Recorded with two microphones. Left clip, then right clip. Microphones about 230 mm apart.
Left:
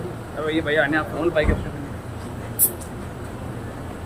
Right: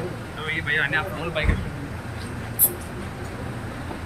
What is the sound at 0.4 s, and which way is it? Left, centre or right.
Speech, left.